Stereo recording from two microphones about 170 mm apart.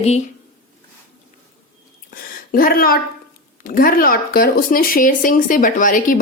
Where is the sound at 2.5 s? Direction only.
55° left (ahead or behind).